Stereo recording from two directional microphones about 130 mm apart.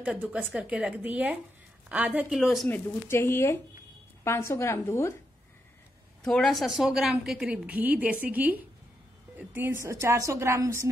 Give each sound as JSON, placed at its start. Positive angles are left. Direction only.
{"t": 0.0, "sound": "a woman's voice", "side_deg": -10}
{"t": 2.7, "sound": "a woman's voice", "side_deg": 15}
{"t": 6.2, "sound": "a woman's voice", "side_deg": 5}